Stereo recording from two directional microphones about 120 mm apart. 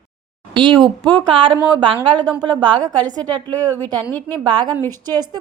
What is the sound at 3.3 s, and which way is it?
Speech, 15° left (ahead or behind).